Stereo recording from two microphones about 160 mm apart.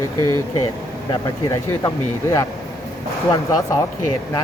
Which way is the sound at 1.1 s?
20° left (ahead or behind).